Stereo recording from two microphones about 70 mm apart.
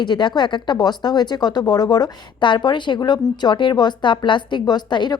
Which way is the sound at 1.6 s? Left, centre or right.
Left.